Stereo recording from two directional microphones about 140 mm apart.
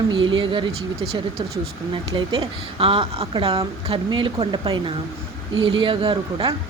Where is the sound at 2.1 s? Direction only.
35° right (ahead or behind).